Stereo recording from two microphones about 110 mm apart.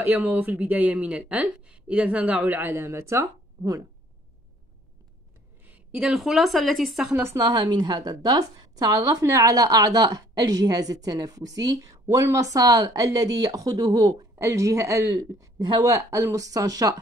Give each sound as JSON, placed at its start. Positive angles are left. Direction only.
{"t": 0.0, "sound": "speech", "side_deg": -15}
{"t": 5.7, "sound": "a woman's voice", "side_deg": -10}
{"t": 7.2, "sound": "a woman's voice", "side_deg": -30}